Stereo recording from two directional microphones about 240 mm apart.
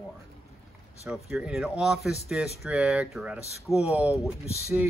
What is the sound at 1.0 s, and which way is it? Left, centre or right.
Speech, centre.